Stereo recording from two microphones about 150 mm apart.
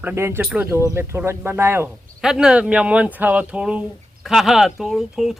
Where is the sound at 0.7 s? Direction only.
15° right (ahead or behind).